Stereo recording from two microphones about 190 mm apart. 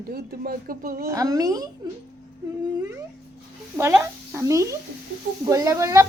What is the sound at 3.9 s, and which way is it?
A woman's voice, 15° right (ahead or behind).